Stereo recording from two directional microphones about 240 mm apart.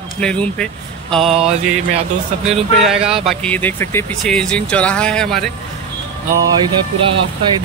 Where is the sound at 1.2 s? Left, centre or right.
Right.